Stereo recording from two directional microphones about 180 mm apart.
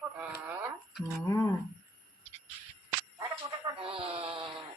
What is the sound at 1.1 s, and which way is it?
Speech, 15° left (ahead or behind).